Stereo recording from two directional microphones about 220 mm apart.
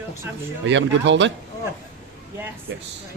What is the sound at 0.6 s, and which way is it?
Speech, 55° right (ahead or behind).